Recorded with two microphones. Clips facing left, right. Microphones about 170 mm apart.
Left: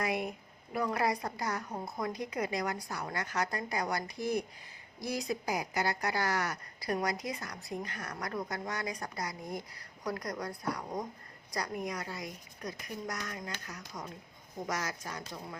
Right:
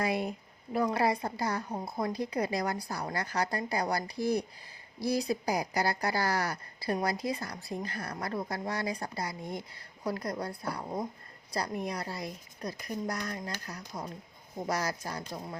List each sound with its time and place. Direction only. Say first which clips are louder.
0.0 s a woman's voice: right 3 dB; 30° right (ahead or behind)